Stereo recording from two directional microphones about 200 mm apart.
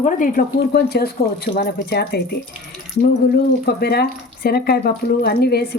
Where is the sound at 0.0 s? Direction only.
45° left (ahead or behind).